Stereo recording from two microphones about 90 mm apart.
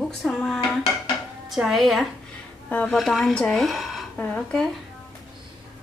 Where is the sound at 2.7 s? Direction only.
15° left (ahead or behind).